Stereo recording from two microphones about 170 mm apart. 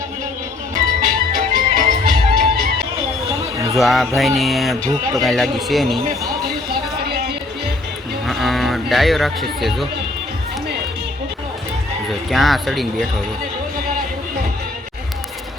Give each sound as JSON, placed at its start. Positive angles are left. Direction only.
{"t": 1.0, "sound": "music", "side_deg": -55}
{"t": 3.8, "sound": "speech", "side_deg": 0}
{"t": 7.0, "sound": "music", "side_deg": -75}
{"t": 8.3, "sound": "speech", "side_deg": 0}
{"t": 12.3, "sound": "speech", "side_deg": 0}